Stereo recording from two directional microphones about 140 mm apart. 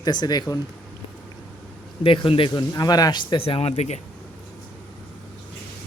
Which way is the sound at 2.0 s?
40° left (ahead or behind).